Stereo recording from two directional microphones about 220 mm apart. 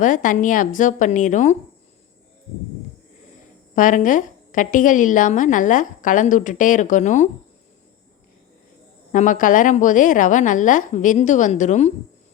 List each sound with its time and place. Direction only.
0.0 s a woman's voice: 35° left (ahead or behind)
3.8 s a woman's voice: 35° left (ahead or behind)
9.1 s a woman's voice: 35° left (ahead or behind)